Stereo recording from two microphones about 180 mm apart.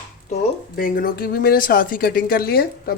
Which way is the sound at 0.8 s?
50° left (ahead or behind).